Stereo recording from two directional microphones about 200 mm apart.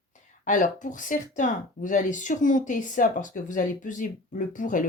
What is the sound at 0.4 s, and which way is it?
Speech, 40° left (ahead or behind).